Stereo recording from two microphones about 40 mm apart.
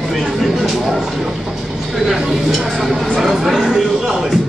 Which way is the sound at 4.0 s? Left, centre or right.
Centre.